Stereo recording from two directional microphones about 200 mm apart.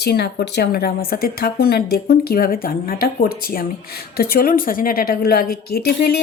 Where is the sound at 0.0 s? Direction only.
55° left (ahead or behind).